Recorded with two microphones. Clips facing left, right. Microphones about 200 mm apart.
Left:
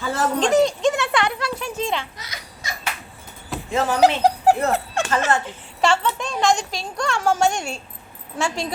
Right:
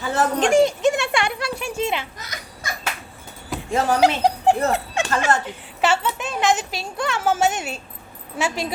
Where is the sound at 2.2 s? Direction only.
50° right (ahead or behind).